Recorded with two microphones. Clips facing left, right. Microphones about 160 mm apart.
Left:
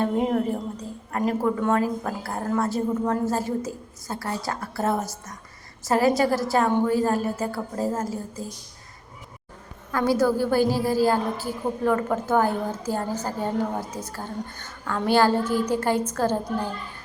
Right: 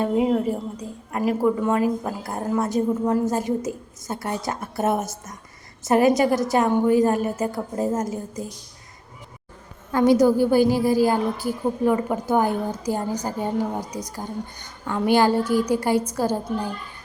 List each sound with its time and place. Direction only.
0.0 s a woman's voice: 5° right (ahead or behind)
9.9 s a woman's voice: 20° right (ahead or behind)